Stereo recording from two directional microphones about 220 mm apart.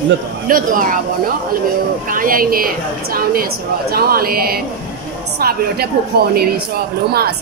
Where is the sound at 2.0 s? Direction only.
40° right (ahead or behind).